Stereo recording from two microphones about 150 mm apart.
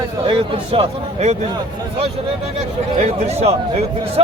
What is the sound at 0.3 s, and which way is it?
A man's voice, 40° right (ahead or behind).